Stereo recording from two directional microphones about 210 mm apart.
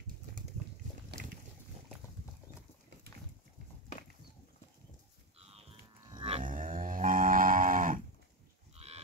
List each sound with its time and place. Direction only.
6.0 s a sound: 25° right (ahead or behind)
6.4 s livestock: 40° right (ahead or behind)
8.7 s livestock: 30° right (ahead or behind)